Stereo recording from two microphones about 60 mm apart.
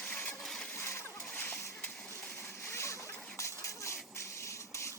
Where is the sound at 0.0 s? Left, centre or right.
Left.